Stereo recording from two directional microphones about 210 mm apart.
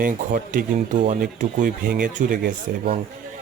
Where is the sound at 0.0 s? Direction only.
40° right (ahead or behind).